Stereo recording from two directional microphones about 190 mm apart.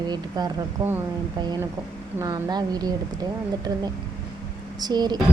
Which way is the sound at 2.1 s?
20° right (ahead or behind).